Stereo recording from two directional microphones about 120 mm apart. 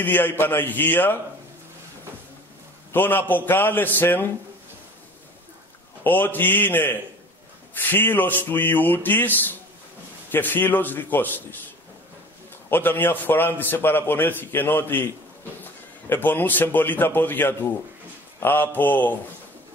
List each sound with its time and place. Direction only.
0.0 s a man's voice: 15° left (ahead or behind)
2.9 s a man's voice: 15° left (ahead or behind)
6.0 s a man's voice: 15° left (ahead or behind)
12.6 s a man's voice: 15° left (ahead or behind)